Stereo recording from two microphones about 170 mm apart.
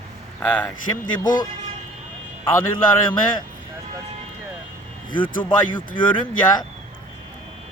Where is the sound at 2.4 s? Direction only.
30° left (ahead or behind).